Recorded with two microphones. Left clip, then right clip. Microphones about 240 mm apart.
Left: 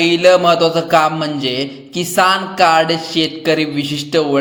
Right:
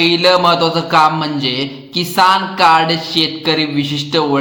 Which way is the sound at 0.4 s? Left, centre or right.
Centre.